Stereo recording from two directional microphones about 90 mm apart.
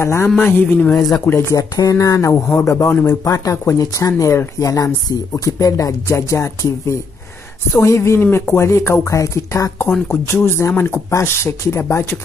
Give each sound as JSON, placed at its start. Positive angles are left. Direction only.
{"t": 0.0, "sound": "speech", "side_deg": 30}
{"t": 1.6, "sound": "speech", "side_deg": 40}
{"t": 3.1, "sound": "speech", "side_deg": 35}